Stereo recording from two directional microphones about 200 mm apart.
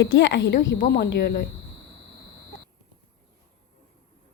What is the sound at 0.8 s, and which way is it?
Speech, 50° left (ahead or behind).